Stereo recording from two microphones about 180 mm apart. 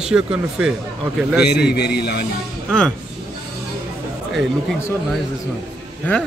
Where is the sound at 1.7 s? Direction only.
60° left (ahead or behind).